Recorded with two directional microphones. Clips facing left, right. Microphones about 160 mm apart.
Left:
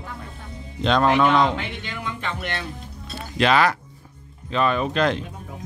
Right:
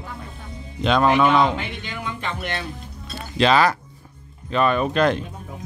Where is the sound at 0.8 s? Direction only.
10° right (ahead or behind).